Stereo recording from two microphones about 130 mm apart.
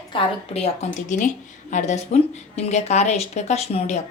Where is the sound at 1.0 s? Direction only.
75° left (ahead or behind); by 4.0 s 55° left (ahead or behind).